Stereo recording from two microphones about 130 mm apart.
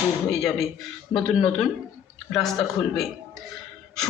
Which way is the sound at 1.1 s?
5° left (ahead or behind).